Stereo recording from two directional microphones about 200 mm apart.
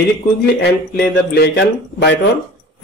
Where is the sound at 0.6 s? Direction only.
55° left (ahead or behind).